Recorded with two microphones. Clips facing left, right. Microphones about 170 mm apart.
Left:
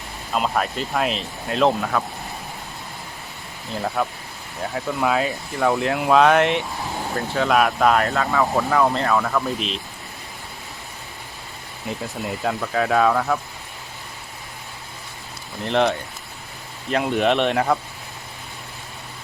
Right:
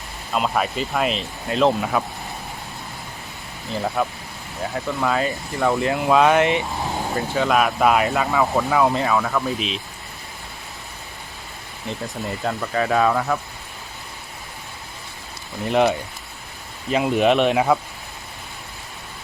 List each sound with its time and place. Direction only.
0.3 s speech: centre (ahead or behind)
3.8 s speech: centre (ahead or behind)
8.1 s speech: 15° right (ahead or behind)
8.4 s speech: 5° right (ahead or behind)
11.9 s speech: centre (ahead or behind)
15.6 s speech: 5° right (ahead or behind)